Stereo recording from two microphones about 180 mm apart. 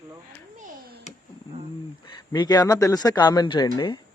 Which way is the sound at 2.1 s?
25° left (ahead or behind).